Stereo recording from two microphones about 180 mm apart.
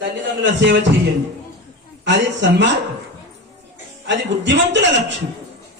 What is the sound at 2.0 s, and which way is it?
Speech, 80° right.